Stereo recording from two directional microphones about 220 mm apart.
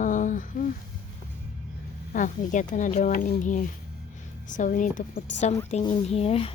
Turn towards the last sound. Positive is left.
turn(degrees=25)  # may be behind; listen again after turning